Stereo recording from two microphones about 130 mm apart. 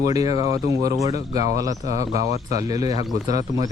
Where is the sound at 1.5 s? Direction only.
25° right (ahead or behind).